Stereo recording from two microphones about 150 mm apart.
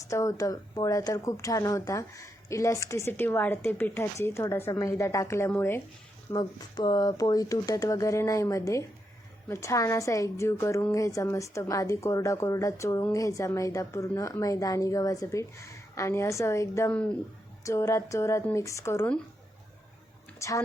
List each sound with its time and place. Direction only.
0.1 s speech: 20° left (ahead or behind)
6.3 s speech: 25° left (ahead or behind)
20.4 s a woman's voice: 20° left (ahead or behind)